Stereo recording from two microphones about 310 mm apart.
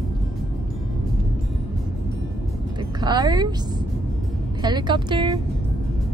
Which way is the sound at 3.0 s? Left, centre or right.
Centre.